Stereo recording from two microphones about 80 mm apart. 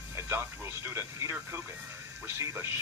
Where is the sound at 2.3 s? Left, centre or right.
Right.